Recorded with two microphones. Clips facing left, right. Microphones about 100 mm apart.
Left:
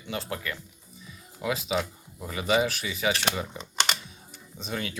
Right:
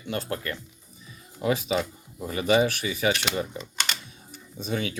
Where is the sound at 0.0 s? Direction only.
45° right (ahead or behind).